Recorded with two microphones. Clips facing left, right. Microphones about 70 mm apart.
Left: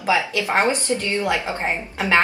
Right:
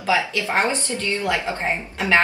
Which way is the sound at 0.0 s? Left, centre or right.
Left.